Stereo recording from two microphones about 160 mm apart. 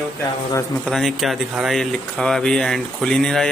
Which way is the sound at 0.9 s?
Centre (ahead or behind).